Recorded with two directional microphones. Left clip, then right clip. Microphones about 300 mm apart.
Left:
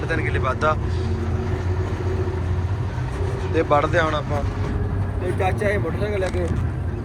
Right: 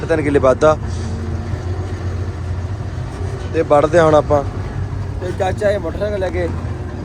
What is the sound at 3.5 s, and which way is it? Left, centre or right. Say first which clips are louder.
Speech: right 7 dB; centre.